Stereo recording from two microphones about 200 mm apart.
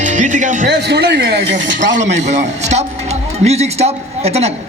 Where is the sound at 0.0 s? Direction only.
40° right (ahead or behind).